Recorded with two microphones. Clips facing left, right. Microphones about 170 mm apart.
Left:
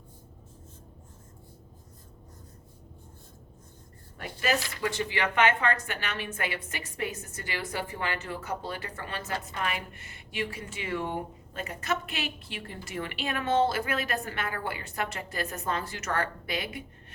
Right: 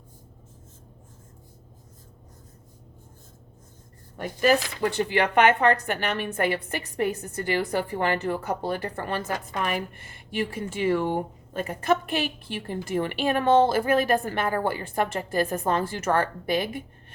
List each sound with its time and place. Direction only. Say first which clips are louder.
4.2 s a woman's voice: right 8 dB; 45° right (ahead or behind)
4.9 s a woman's voice: right 6 dB; 60° right (ahead or behind)
6.2 s a woman's voice: right 8 dB; 40° right (ahead or behind)